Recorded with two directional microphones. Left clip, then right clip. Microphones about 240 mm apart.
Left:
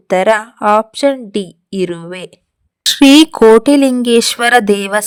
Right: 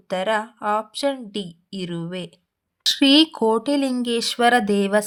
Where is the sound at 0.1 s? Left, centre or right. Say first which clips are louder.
Left 11 dB; left.